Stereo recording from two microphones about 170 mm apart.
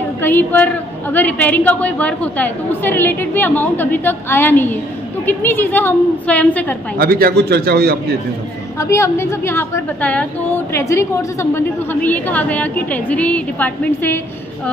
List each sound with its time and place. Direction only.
0.2 s a woman's voice: 10° left (ahead or behind)
7.0 s a man's voice: 60° right (ahead or behind)
8.7 s a woman's voice: 15° left (ahead or behind)